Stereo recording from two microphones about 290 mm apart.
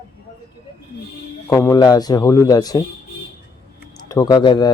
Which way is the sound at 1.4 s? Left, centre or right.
Centre.